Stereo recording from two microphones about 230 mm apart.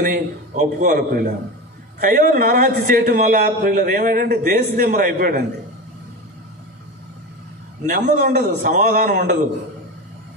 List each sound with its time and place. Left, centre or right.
0.0 s a man's voice: right
7.8 s a man's voice: right